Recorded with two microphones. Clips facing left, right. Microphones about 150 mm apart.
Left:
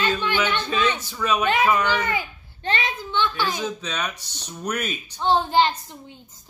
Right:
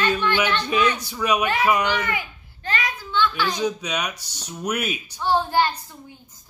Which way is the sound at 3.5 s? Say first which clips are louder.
Right 3 dB; 15° right (ahead or behind).